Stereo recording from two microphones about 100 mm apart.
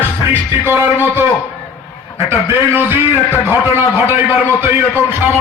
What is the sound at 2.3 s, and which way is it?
Speech, 25° right (ahead or behind).